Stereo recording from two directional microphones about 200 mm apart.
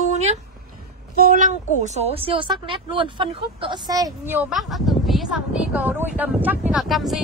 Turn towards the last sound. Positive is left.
turn(degrees=0)  # may be behind; listen again after turning